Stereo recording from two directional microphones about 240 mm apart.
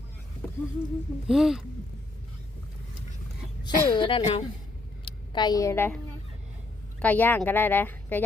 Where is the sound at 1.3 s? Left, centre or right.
Centre.